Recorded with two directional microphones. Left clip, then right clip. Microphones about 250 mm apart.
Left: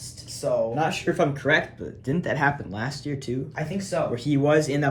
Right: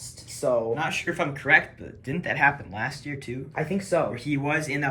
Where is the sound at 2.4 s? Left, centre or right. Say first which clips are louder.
Right 6 dB; right.